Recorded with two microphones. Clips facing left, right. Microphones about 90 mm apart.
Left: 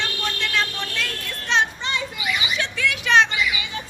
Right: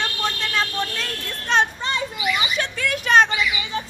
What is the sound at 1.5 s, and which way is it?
Children playing, 45° right (ahead or behind).